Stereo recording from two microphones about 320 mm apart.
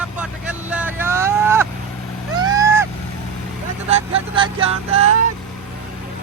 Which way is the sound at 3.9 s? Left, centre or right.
Centre.